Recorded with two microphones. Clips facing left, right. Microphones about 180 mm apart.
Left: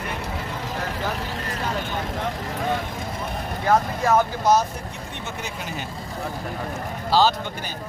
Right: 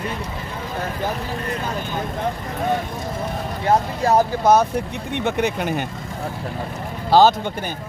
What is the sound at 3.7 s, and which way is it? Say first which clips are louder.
Speech: right 2 dB; 35° right (ahead or behind).